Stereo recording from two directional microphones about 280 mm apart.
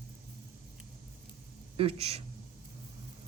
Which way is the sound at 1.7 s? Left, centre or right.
Right.